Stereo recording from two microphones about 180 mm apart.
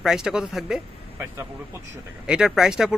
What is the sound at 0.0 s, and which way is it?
Speech, 5° right (ahead or behind).